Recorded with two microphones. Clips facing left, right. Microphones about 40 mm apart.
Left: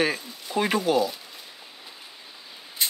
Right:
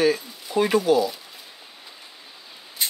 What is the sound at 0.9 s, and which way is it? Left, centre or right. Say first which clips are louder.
Speech: right 2 dB; left.